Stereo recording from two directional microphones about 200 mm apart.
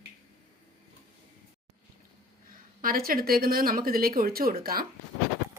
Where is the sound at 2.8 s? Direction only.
45° right (ahead or behind).